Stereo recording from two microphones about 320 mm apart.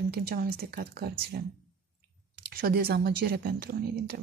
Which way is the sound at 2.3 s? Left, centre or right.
Right.